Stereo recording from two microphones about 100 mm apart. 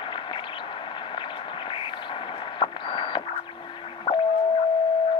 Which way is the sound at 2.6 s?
55° left (ahead or behind).